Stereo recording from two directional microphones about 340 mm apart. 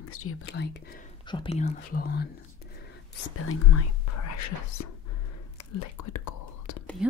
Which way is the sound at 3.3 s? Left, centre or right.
Left.